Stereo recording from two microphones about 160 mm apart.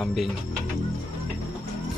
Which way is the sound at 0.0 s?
Centre (ahead or behind).